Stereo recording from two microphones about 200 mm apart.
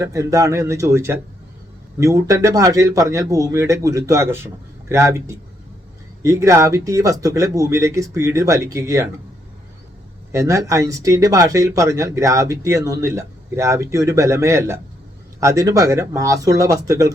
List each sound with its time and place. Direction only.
0.0 s speech: 15° right (ahead or behind)
10.3 s speech: 15° right (ahead or behind)